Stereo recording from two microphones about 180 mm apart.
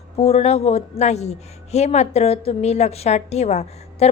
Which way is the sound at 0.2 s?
35° left (ahead or behind).